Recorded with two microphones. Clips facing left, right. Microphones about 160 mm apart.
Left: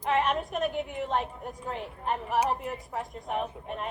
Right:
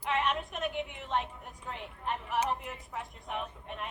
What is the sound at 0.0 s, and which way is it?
A woman's voice, 40° left (ahead or behind).